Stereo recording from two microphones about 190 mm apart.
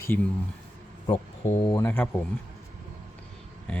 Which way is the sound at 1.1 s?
30° left (ahead or behind).